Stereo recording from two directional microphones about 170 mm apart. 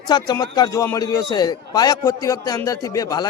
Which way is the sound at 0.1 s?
25° left (ahead or behind).